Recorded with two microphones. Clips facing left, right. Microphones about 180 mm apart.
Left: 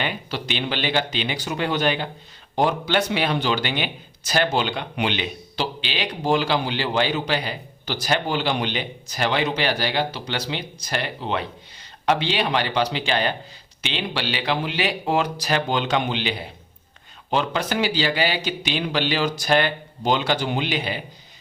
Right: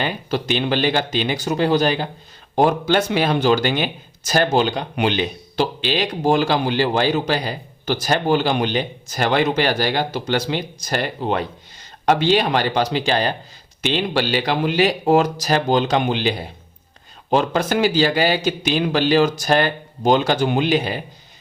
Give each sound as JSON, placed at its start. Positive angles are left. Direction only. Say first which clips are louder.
{"t": 0.0, "sound": "speech", "louder": "right 5 dB", "side_deg": -45}
{"t": 17.3, "sound": "speech", "louder": "right 5 dB", "side_deg": -45}